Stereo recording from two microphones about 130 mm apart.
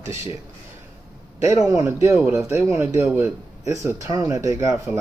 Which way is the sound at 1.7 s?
20° right (ahead or behind).